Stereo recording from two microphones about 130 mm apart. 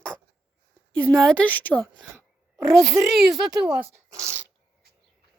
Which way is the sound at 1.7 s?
5° right (ahead or behind).